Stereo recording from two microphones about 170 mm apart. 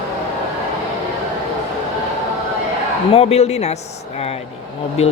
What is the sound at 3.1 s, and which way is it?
Speech, 40° left (ahead or behind).